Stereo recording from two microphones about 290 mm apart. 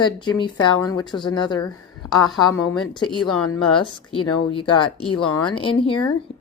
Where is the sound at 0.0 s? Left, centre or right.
Centre.